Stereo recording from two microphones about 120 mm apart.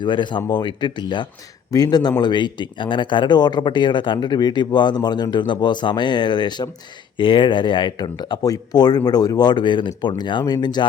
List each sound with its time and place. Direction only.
0.0 s speech: 40° left (ahead or behind)